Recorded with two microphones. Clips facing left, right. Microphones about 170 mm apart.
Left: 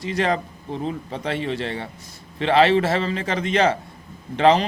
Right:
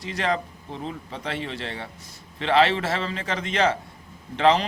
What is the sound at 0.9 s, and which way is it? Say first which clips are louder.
Speech: left 5 dB; 50° left (ahead or behind).